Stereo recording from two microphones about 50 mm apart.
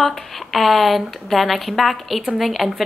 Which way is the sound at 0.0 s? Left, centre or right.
Centre.